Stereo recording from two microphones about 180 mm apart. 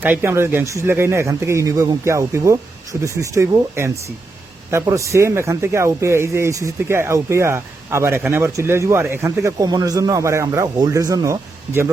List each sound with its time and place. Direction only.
0.0 s speech: 10° right (ahead or behind)